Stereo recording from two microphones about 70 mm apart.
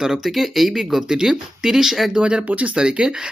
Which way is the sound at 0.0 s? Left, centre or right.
Centre.